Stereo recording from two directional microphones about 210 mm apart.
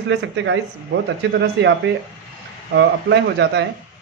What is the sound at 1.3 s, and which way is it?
A man's voice, 55° right (ahead or behind).